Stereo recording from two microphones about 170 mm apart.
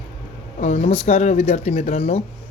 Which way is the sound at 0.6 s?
40° left (ahead or behind).